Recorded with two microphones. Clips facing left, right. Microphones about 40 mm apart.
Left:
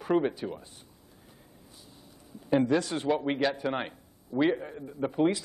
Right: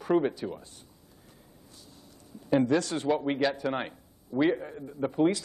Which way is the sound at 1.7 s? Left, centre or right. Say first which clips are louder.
Right 1 dB; centre.